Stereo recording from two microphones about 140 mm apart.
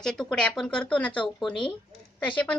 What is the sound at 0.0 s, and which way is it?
Speech, 5° left (ahead or behind).